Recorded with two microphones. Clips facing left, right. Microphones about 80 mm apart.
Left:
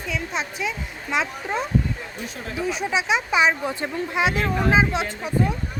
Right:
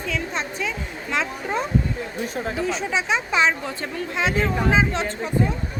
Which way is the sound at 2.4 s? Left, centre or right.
Right.